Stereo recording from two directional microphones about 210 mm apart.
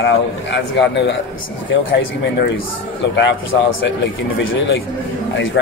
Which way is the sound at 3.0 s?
55° left (ahead or behind).